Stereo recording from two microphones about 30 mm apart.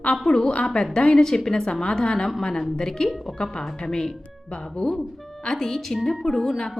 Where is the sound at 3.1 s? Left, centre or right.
Centre.